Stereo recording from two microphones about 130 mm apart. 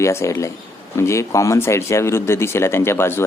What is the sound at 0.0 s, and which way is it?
Speech, 20° left (ahead or behind).